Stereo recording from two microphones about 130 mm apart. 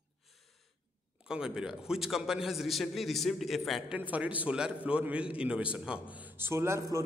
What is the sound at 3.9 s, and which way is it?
A man's voice, 10° right (ahead or behind).